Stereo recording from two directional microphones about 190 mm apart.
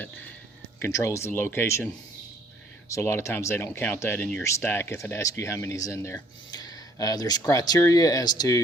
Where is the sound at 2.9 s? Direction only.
15° left (ahead or behind).